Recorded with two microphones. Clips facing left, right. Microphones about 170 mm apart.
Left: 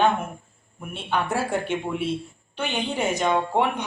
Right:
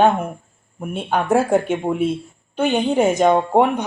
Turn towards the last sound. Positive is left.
turn(degrees=-45)  # may be behind; listen again after turning